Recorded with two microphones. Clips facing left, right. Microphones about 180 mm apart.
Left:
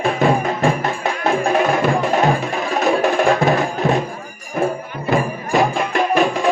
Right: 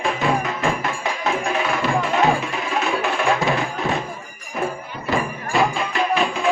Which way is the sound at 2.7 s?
40° left (ahead or behind).